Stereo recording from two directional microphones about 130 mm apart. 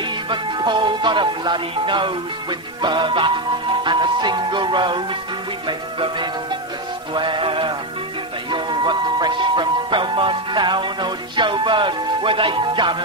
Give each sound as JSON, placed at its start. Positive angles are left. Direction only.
{"t": 0.3, "sound": "music", "side_deg": -35}